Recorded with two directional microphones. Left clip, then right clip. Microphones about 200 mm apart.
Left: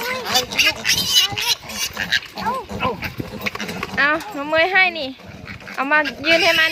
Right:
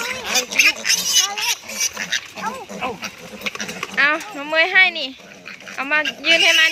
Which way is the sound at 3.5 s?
50° left (ahead or behind).